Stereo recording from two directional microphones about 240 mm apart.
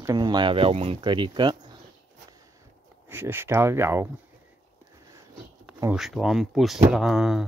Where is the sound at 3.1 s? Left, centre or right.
Centre.